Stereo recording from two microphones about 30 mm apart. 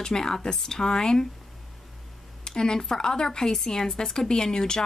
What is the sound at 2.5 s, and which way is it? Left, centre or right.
Speech, left.